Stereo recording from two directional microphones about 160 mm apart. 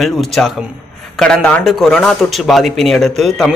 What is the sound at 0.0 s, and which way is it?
A man's voice, centre (ahead or behind).